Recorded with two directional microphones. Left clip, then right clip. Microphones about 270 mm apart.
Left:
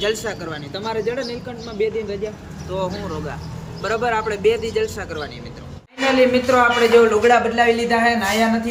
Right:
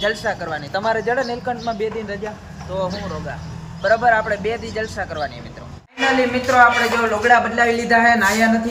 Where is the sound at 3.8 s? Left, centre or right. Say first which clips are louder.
Right 5 dB; centre.